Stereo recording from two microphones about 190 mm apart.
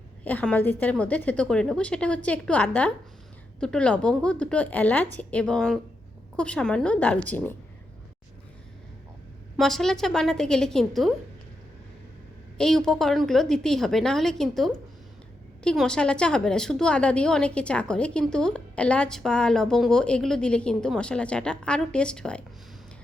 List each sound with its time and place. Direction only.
0.3 s a woman's voice: 10° left (ahead or behind)
9.6 s a woman's voice: centre (ahead or behind)
12.5 s a woman's voice: 5° left (ahead or behind)